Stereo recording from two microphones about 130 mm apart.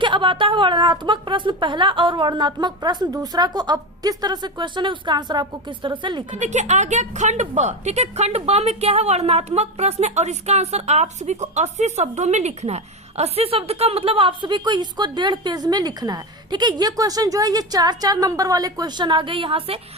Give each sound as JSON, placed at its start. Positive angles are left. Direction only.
{"t": 0.0, "sound": "a woman's voice", "side_deg": -40}
{"t": 6.3, "sound": "speech", "side_deg": -65}